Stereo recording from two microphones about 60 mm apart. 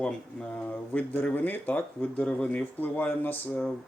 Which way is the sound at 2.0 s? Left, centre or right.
Centre.